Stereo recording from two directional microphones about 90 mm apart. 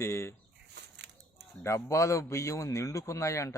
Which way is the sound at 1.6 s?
35° left (ahead or behind).